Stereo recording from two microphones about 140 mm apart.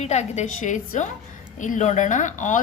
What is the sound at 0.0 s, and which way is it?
A woman's voice, 50° left (ahead or behind).